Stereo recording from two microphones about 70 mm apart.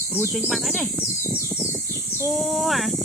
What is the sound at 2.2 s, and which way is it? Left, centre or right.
Speech, centre.